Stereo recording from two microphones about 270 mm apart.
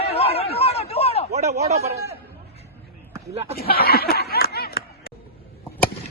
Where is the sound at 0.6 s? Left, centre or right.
Left.